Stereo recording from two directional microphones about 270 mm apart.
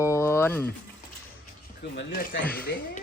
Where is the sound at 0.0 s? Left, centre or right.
Centre.